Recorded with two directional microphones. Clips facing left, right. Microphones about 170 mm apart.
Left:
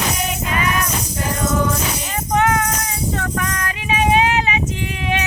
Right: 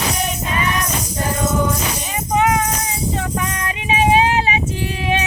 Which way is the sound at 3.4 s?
25° right (ahead or behind).